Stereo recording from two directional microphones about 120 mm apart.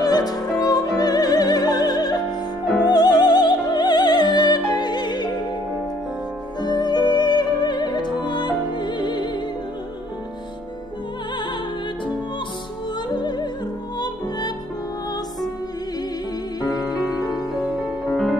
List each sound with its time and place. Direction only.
0.0 s music: 35° left (ahead or behind)
6.6 s music: 35° left (ahead or behind)
13.1 s music: 35° left (ahead or behind)
16.6 s music: 35° left (ahead or behind)
17.6 s music: 5° right (ahead or behind)